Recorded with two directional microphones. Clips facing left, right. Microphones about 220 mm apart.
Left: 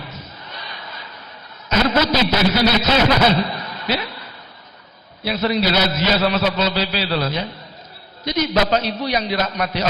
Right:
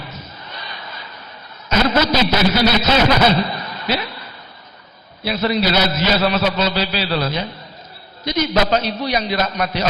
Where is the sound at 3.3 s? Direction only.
20° right (ahead or behind).